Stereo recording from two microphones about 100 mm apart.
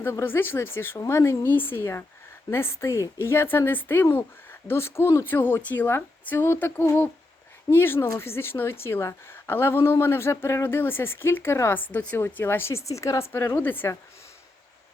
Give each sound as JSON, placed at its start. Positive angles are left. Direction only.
{"t": 0.0, "sound": "a woman's voice", "side_deg": 20}
{"t": 13.6, "sound": "a woman's voice", "side_deg": 20}